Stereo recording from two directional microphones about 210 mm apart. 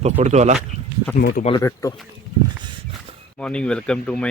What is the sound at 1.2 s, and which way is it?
Speech, 45° left (ahead or behind).